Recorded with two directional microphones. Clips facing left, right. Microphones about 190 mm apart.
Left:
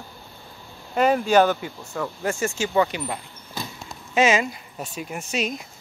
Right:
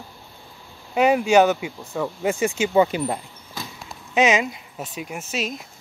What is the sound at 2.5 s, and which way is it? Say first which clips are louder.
Speech: right 4 dB; 20° right (ahead or behind).